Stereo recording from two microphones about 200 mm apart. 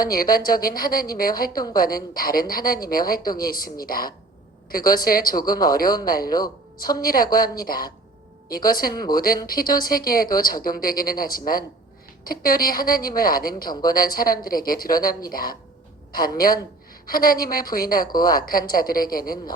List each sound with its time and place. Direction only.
0.0 s a woman's voice: 45° left (ahead or behind)